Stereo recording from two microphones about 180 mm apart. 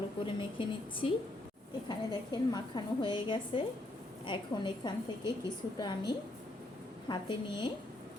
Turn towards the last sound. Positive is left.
turn(degrees=25)  # may be behind; listen again after turning